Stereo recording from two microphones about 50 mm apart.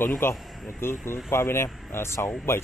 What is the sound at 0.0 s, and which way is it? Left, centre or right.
Speech, left.